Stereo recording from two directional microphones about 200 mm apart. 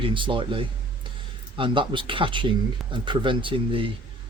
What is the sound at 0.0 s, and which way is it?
Speech, 25° right (ahead or behind).